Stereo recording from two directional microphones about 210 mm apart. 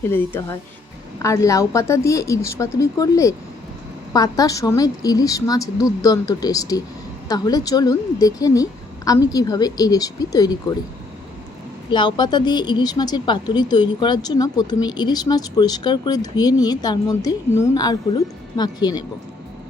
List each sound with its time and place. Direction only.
0.0 s a woman's voice: 10° left (ahead or behind)
11.9 s a woman's voice: 20° left (ahead or behind)